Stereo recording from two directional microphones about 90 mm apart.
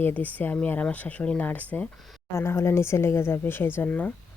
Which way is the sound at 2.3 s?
30° left (ahead or behind).